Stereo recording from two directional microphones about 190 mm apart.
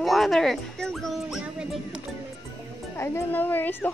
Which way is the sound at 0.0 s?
Centre (ahead or behind).